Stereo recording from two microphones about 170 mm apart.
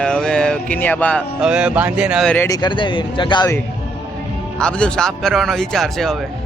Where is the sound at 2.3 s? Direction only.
15° left (ahead or behind).